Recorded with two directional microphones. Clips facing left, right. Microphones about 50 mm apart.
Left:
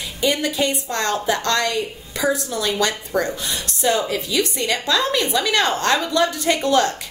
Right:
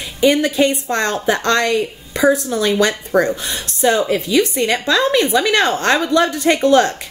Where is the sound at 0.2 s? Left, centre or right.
Right.